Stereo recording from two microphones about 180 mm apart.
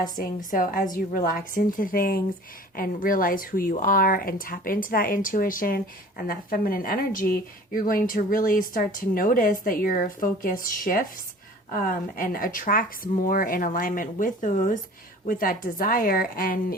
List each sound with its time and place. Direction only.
0.0 s speech: 50° left (ahead or behind)